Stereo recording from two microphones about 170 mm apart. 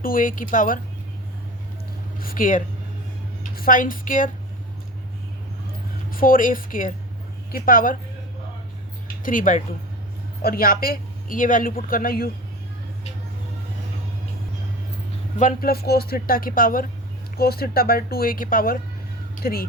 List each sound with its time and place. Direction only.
0.0 s speech: 55° left (ahead or behind)
2.1 s speech: 55° left (ahead or behind)
6.1 s speech: 55° left (ahead or behind)
9.2 s speech: 50° left (ahead or behind)
15.4 s speech: 55° left (ahead or behind)